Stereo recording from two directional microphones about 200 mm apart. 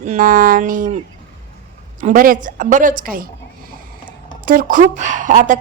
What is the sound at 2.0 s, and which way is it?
Speech, 45° right (ahead or behind).